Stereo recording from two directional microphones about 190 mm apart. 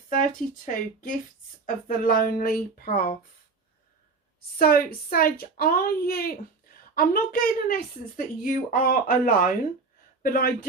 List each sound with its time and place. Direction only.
0.1 s a woman's voice: 45° left (ahead or behind)
4.5 s a woman's voice: 50° left (ahead or behind)